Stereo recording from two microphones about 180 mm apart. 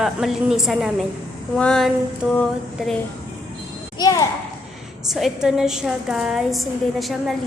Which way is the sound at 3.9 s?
20° left (ahead or behind).